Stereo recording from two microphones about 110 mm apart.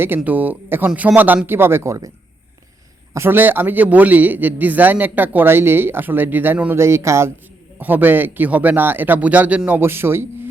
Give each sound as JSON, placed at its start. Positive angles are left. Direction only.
{"t": 0.2, "sound": "a man's voice", "side_deg": -15}
{"t": 3.1, "sound": "a man's voice", "side_deg": -20}